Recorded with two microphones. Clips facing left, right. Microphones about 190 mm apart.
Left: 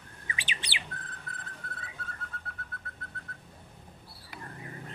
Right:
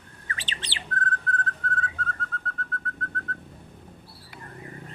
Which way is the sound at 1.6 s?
10° left (ahead or behind).